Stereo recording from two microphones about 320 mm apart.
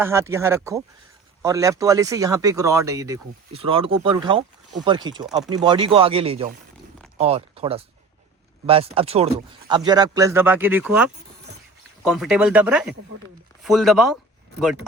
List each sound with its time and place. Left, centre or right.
0.0 s speech: centre